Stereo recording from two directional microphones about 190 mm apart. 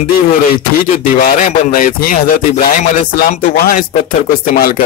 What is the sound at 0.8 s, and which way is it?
Speech, 50° left (ahead or behind).